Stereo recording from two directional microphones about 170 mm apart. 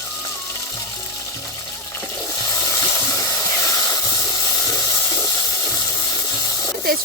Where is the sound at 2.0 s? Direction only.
20° left (ahead or behind).